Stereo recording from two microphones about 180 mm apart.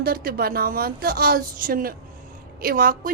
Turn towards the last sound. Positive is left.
turn(degrees=-55)  # may be behind; listen again after turning